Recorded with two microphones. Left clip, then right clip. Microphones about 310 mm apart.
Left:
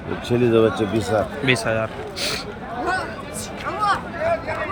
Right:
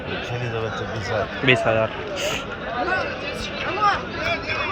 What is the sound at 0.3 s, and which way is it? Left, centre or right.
Speech, left.